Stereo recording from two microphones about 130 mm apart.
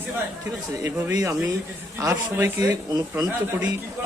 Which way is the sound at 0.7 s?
25° right (ahead or behind).